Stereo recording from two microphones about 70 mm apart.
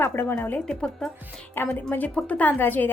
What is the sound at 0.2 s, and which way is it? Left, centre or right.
Speech, left.